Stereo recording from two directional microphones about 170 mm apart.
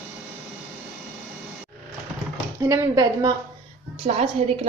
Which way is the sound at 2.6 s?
20° right (ahead or behind).